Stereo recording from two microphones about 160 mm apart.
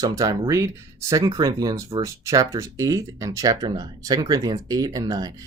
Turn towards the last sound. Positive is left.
turn(degrees=-25)  # may be behind; listen again after turning